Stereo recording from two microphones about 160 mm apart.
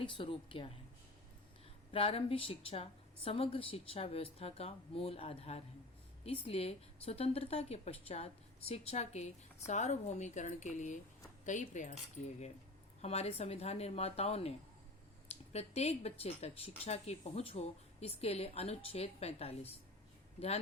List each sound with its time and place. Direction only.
0.0 s a woman's voice: 35° left (ahead or behind)
1.9 s a woman's voice: 35° left (ahead or behind); by 11.9 s 50° left (ahead or behind)
13.0 s a woman's voice: 40° left (ahead or behind)